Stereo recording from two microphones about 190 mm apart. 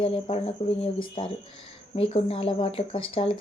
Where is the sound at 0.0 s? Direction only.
30° left (ahead or behind).